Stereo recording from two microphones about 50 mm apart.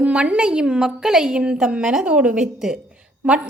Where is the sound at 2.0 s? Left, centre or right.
Right.